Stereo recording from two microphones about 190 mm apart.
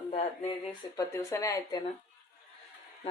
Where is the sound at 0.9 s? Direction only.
15° left (ahead or behind).